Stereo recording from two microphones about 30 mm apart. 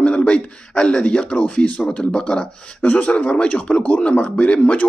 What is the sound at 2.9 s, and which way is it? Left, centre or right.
A man's voice, left.